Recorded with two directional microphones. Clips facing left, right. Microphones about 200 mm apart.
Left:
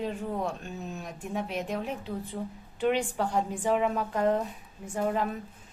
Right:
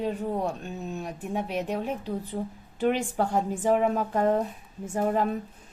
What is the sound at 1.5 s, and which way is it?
A woman's voice, 35° right (ahead or behind).